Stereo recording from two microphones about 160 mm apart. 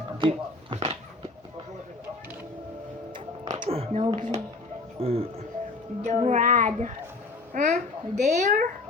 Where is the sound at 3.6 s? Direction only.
35° right (ahead or behind).